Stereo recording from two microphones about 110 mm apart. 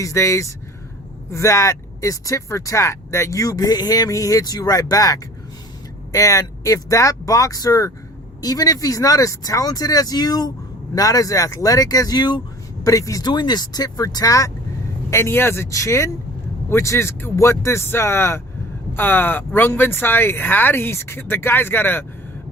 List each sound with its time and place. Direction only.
0.0 s speech: 30° left (ahead or behind)